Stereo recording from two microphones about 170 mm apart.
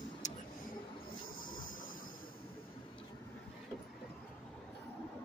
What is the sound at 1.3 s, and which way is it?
Train, 55° left (ahead or behind).